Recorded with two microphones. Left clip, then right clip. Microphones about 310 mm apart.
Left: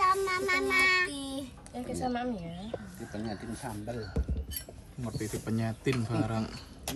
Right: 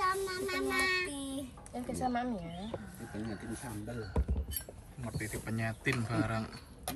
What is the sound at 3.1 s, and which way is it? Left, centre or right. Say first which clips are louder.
Speech: left 3 dB; centre.